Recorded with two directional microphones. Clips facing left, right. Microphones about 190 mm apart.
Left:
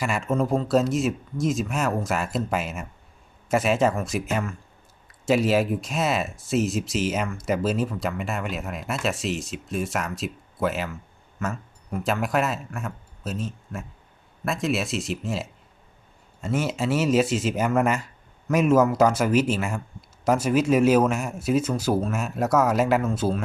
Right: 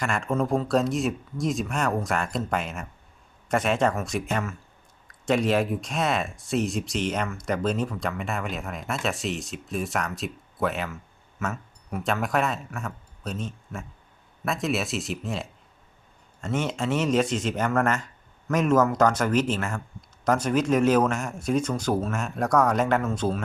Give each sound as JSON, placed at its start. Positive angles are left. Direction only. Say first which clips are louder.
{"t": 0.0, "sound": "speech", "louder": "left 1 dB", "side_deg": 5}